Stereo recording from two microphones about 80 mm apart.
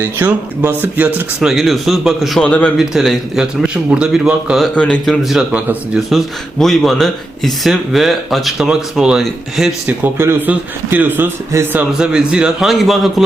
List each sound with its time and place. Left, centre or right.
0.0 s a man's voice: right
1.4 s speech: centre
2.4 s a man's voice: centre
2.7 s speech: centre
4.7 s a man's voice: centre
5.0 s speech: centre
9.8 s a man's voice: right
11.5 s a man's voice: right
11.9 s speech: centre